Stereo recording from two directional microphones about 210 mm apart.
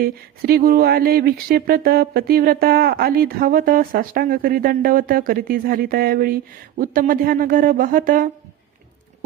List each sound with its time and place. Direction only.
0.0 s speech: 45° right (ahead or behind)